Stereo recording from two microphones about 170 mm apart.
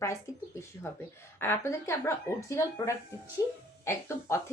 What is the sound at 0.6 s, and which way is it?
Speech, 15° left (ahead or behind).